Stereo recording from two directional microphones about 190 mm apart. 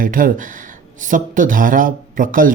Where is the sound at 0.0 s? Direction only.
45° right (ahead or behind).